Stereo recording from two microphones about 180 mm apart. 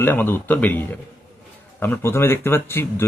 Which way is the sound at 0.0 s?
10° left (ahead or behind).